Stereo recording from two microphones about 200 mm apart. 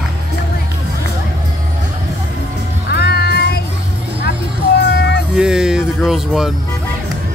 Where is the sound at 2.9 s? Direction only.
55° left (ahead or behind).